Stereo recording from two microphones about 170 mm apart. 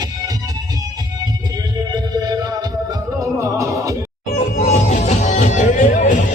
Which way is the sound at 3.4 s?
20° right (ahead or behind).